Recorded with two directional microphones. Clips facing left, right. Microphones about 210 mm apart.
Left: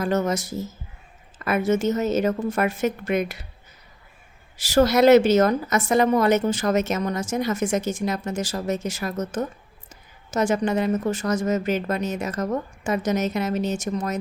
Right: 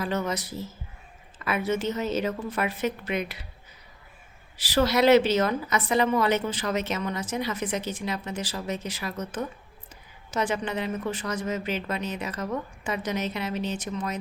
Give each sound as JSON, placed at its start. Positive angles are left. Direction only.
{"t": 0.0, "sound": "a woman's voice", "side_deg": 45}
{"t": 4.5, "sound": "a woman's voice", "side_deg": 45}